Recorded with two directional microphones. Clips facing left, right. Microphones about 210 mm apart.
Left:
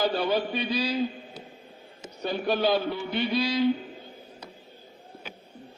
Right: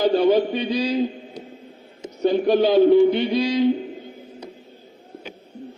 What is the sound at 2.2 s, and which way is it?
Speech, 20° right (ahead or behind).